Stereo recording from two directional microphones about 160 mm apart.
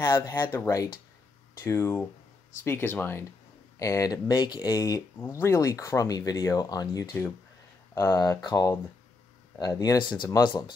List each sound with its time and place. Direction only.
0.0 s speech: 15° left (ahead or behind)